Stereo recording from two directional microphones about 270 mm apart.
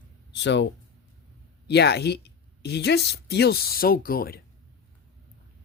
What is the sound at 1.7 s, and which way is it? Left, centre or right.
Speech, left.